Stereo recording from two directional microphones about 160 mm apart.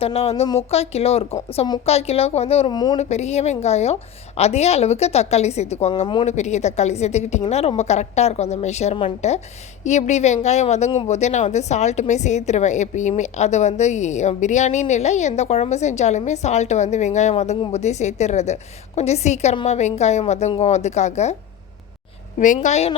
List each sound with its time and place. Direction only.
0.0 s a woman's voice: 40° left (ahead or behind)
2.7 s speech: 25° left (ahead or behind)
3.0 s a woman's voice: 45° left (ahead or behind)
10.9 s a woman's voice: 30° left (ahead or behind)
11.2 s a woman's voice: 45° left (ahead or behind)
22.4 s a woman's voice: 50° left (ahead or behind)